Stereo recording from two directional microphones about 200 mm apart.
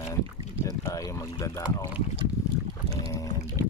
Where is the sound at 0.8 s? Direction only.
15° left (ahead or behind).